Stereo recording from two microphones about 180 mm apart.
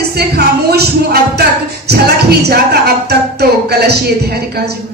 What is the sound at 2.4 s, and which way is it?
Speech, 65° right (ahead or behind).